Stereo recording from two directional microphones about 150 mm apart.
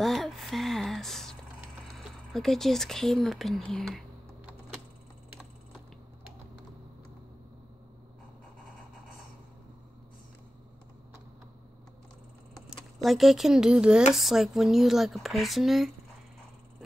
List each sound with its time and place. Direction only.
0.0 s a sound: centre (ahead or behind)
2.3 s speech: centre (ahead or behind)
12.6 s speech: centre (ahead or behind)